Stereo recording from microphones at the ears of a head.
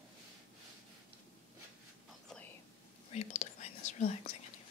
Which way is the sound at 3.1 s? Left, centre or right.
Left.